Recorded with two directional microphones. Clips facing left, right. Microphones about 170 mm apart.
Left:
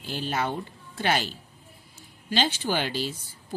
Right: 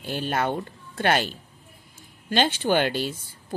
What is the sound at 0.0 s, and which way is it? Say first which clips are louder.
A woman's voice: right 3 dB; 55° right (ahead or behind).